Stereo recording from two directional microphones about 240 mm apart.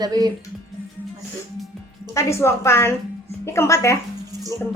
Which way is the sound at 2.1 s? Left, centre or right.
Centre.